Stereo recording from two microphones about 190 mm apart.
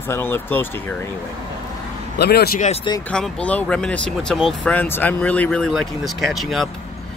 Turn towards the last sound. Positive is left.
turn(degrees=0)  # may be behind; listen again after turning